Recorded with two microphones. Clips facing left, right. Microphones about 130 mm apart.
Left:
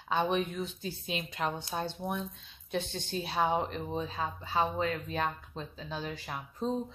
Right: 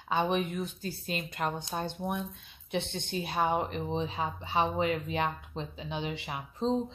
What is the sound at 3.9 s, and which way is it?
Speech, 25° right (ahead or behind).